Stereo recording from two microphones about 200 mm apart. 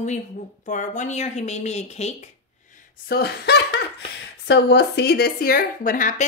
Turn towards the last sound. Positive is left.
turn(degrees=40)  # may be behind; listen again after turning